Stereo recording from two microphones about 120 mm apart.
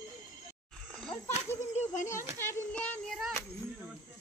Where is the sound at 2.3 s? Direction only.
20° left (ahead or behind).